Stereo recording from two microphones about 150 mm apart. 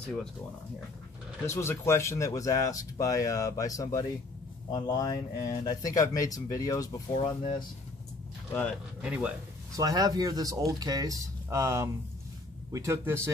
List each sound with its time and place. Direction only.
1.4 s speech: 20° left (ahead or behind)
9.0 s a man's voice: 5° right (ahead or behind)
9.8 s a man's voice: 25° right (ahead or behind)